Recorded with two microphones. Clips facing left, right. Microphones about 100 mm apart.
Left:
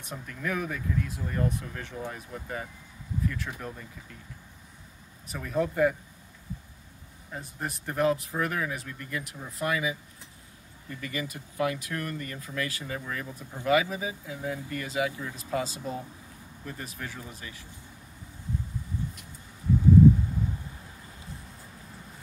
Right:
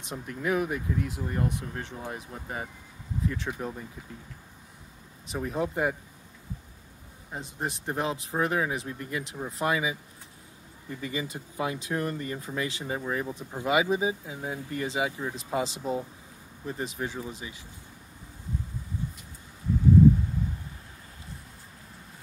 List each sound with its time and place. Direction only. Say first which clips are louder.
0.1 s speech: right 4 dB; 20° right (ahead or behind)
5.3 s speech: left 1 dB; 20° right (ahead or behind)
7.2 s speech: right 2 dB; 25° right (ahead or behind)